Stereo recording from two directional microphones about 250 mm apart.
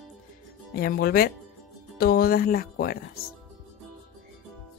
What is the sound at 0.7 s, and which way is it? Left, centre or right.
Speech, left.